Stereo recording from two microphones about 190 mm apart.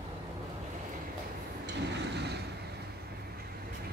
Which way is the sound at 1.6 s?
65° right (ahead or behind).